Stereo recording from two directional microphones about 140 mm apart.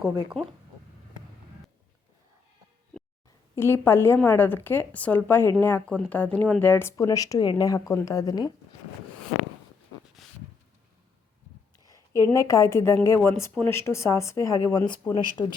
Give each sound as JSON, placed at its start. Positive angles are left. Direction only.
{"t": 0.0, "sound": "speech", "side_deg": -5}
{"t": 3.5, "sound": "a woman's voice", "side_deg": 15}
{"t": 11.9, "sound": "speech", "side_deg": 20}